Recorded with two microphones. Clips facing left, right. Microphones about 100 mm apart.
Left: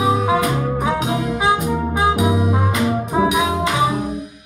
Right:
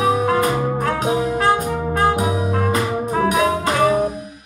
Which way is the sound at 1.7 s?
5° left (ahead or behind).